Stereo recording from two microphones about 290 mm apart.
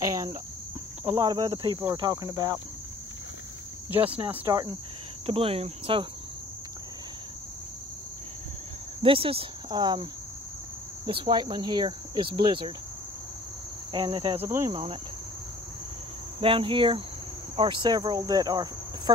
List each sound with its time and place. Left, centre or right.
0.0 s cricket: centre
1.1 s speech: centre
4.3 s speech: centre
5.2 s cricket: centre
9.0 s speech: centre
11.1 s speech: centre
13.9 s cricket: centre
14.4 s speech: centre
16.3 s speech: centre